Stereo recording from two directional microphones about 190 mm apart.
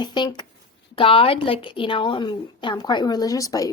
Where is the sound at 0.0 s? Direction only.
25° left (ahead or behind).